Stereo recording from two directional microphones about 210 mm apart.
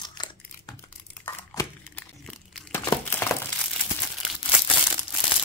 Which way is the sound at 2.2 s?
Centre (ahead or behind).